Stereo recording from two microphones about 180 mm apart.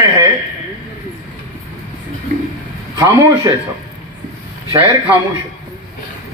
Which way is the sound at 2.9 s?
15° right (ahead or behind).